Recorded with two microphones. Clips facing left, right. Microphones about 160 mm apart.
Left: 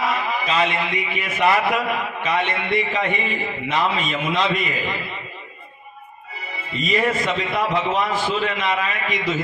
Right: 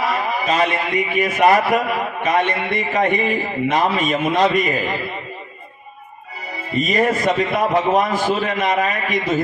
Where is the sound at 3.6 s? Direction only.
45° right (ahead or behind).